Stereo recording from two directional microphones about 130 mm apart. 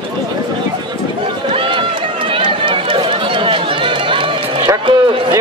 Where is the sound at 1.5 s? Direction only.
40° right (ahead or behind).